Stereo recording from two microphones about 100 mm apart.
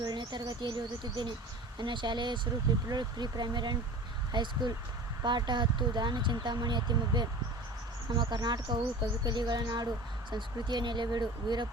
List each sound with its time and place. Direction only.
0.0 s speech: 45° right (ahead or behind)